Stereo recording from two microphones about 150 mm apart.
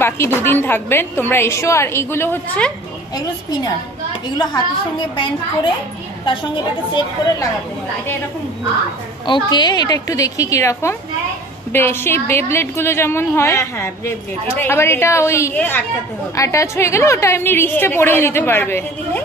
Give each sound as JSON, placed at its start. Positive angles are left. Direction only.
{"t": 0.0, "sound": "a woman's voice", "side_deg": 15}
{"t": 4.9, "sound": "a woman's voice", "side_deg": 35}
{"t": 6.9, "sound": "a woman's voice", "side_deg": 30}
{"t": 9.2, "sound": "a woman's voice", "side_deg": 30}